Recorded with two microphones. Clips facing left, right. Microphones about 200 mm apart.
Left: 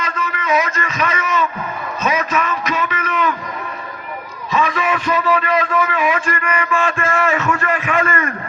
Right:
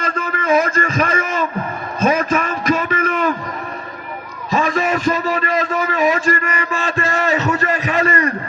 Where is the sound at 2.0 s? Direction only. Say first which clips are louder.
Right 3 dB; 50° right (ahead or behind).